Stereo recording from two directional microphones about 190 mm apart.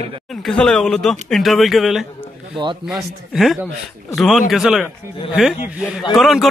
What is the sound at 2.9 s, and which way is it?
A man's voice, centre (ahead or behind).